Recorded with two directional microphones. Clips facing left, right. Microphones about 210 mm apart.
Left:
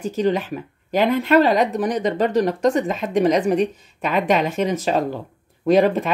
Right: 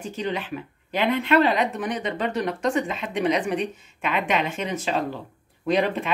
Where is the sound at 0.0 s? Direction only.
40° left (ahead or behind).